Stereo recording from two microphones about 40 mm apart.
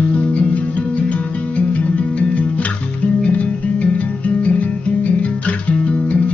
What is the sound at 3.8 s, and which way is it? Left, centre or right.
Music, left.